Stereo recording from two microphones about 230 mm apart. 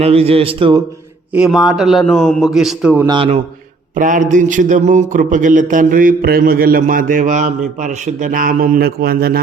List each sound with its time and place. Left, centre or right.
0.0 s speech: right
1.3 s a man's voice: centre
3.1 s speech: right